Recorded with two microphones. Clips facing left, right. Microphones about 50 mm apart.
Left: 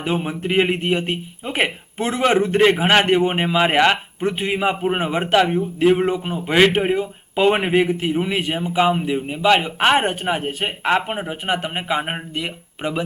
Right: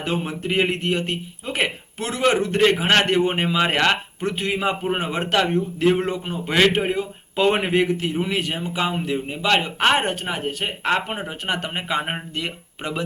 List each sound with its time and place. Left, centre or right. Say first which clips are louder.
0.0 s a man's voice: left 3 dB; centre